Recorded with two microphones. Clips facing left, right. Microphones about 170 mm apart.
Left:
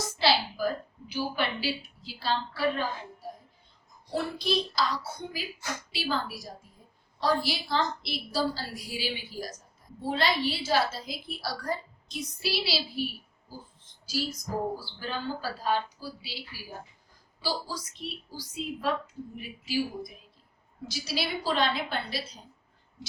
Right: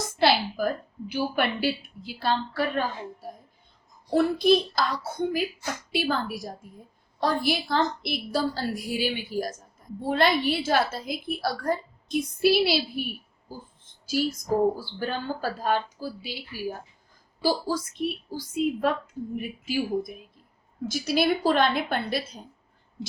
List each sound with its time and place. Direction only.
0.2 s a woman's voice: 55° right (ahead or behind)
4.1 s a woman's voice: 55° right (ahead or behind)
14.8 s a woman's voice: 50° right (ahead or behind)